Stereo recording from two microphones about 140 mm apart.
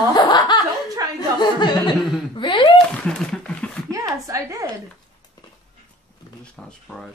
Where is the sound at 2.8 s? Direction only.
5° left (ahead or behind).